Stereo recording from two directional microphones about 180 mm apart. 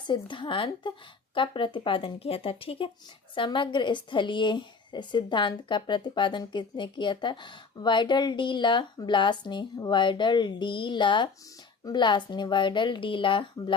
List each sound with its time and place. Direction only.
0.0 s a woman's voice: 25° left (ahead or behind)